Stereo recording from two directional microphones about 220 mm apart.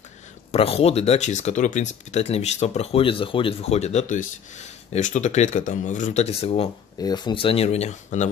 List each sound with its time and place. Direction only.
0.5 s speech: 25° left (ahead or behind)